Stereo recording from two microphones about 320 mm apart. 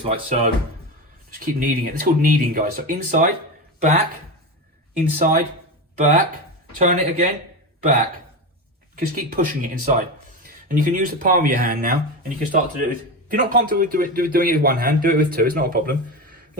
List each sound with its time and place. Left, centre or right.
0.0 s a man's voice: centre
5.2 s a man's voice: right
6.7 s a man's voice: right
9.0 s a man's voice: right